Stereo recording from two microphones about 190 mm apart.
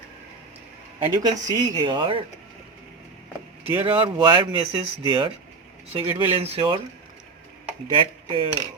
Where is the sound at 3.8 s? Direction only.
30° right (ahead or behind).